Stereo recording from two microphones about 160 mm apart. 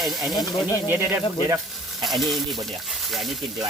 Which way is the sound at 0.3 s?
25° left (ahead or behind).